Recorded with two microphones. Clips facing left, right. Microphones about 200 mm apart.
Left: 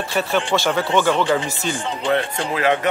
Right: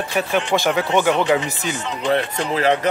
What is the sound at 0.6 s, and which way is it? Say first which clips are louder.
Speech: right 1 dB; 15° right (ahead or behind).